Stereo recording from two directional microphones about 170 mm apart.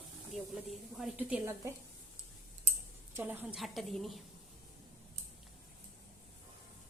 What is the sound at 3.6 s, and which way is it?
Speech, centre (ahead or behind).